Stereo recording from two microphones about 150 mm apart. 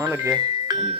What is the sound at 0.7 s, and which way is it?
Music, 30° right (ahead or behind).